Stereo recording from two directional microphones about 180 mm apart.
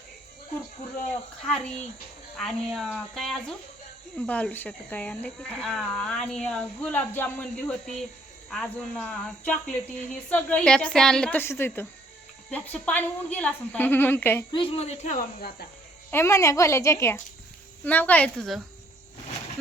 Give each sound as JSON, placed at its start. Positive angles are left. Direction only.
{"t": 1.5, "sound": "speech", "side_deg": 5}
{"t": 14.5, "sound": "speech", "side_deg": 30}
{"t": 16.1, "sound": "speech", "side_deg": 15}